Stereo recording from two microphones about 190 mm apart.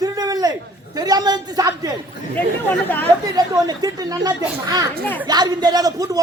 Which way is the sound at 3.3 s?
20° right (ahead or behind).